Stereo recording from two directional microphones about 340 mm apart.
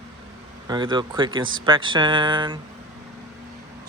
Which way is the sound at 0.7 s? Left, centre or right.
Centre.